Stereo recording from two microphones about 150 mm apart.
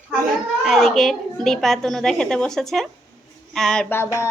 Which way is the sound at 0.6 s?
Centre (ahead or behind).